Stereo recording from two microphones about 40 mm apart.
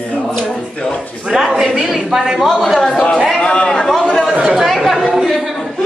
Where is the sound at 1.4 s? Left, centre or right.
Centre.